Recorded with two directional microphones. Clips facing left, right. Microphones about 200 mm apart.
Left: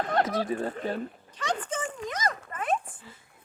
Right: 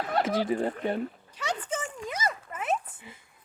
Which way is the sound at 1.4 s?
10° right (ahead or behind).